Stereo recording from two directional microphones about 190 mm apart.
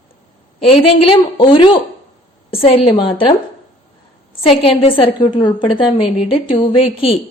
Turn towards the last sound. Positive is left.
turn(degrees=30)  # may be behind; listen again after turning